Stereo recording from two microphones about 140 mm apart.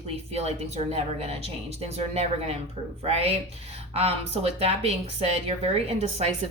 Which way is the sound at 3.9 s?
45° right (ahead or behind).